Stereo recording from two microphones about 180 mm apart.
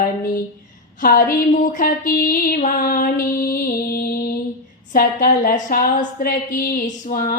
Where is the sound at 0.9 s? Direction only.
50° left (ahead or behind).